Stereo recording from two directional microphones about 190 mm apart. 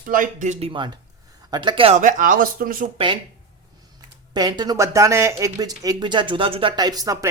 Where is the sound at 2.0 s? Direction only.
40° right (ahead or behind).